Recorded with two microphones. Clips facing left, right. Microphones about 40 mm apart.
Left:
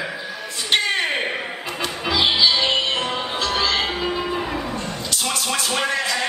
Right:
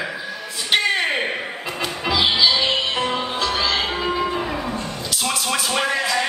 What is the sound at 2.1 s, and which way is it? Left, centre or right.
Music, centre.